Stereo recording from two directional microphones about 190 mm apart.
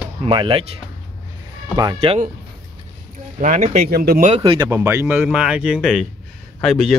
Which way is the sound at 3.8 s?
55° right (ahead or behind).